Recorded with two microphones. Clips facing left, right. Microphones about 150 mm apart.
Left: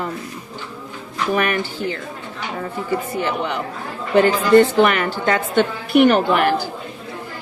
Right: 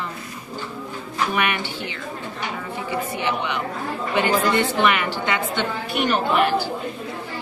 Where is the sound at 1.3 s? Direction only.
40° left (ahead or behind).